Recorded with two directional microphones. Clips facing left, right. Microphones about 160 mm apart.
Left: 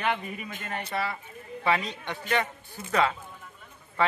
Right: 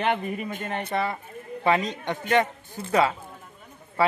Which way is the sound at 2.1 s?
45° right (ahead or behind).